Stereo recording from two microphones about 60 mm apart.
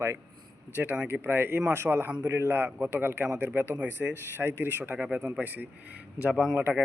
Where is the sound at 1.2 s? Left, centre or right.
Right.